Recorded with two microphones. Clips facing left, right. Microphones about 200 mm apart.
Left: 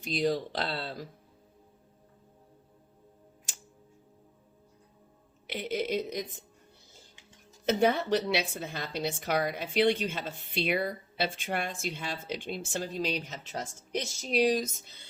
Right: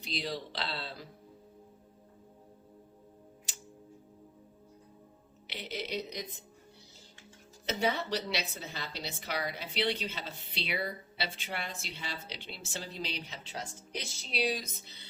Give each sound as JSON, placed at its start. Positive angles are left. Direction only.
{"t": 0.0, "sound": "a woman's voice", "side_deg": 45}
{"t": 5.5, "sound": "a woman's voice", "side_deg": 50}
{"t": 7.7, "sound": "a woman's voice", "side_deg": 50}